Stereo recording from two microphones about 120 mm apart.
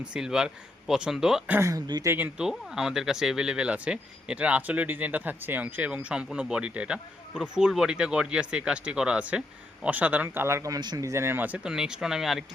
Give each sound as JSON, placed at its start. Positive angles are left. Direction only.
{"t": 0.0, "sound": "speech", "side_deg": -5}
{"t": 1.5, "sound": "speech", "side_deg": -25}
{"t": 2.4, "sound": "speech", "side_deg": -5}